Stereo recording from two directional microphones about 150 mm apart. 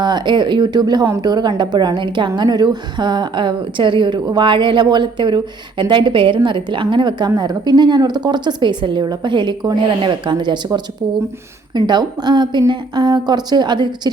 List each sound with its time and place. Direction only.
0.0 s a woman's voice: 30° right (ahead or behind)